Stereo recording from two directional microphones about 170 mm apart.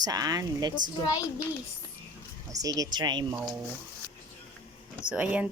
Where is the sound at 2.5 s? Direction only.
20° right (ahead or behind).